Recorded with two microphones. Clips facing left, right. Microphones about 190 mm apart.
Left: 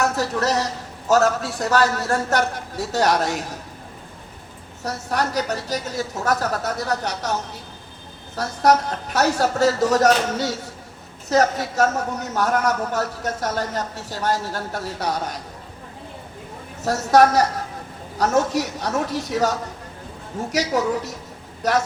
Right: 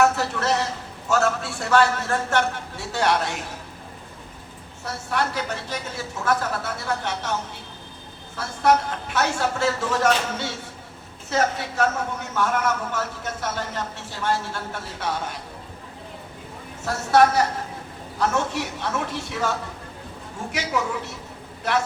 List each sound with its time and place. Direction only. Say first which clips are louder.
0.0 s a man's voice: right 1 dB; 40° left (ahead or behind)
4.8 s a man's voice: left 2 dB; 40° left (ahead or behind)
16.8 s a man's voice: left 2 dB; 40° left (ahead or behind)